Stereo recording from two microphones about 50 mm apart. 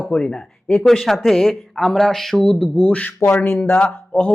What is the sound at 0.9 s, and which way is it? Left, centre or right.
Speech, centre.